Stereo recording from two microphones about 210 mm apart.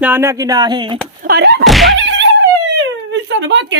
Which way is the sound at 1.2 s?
50° right (ahead or behind).